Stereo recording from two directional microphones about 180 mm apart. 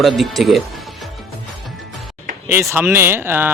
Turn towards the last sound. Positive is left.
turn(degrees=-10)  # may be behind; listen again after turning